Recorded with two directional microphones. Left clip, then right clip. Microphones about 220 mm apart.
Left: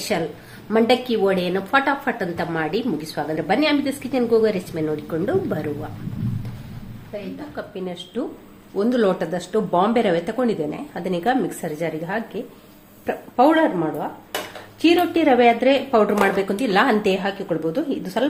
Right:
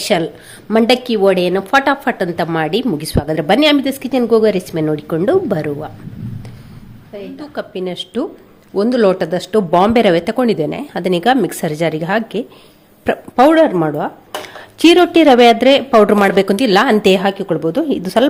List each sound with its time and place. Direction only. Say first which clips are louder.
0.1 s a woman's voice: right 8 dB; 50° right (ahead or behind)
7.5 s a woman's voice: right 10 dB; 45° right (ahead or behind)